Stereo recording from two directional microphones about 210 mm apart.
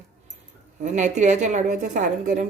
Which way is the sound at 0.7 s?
35° right (ahead or behind).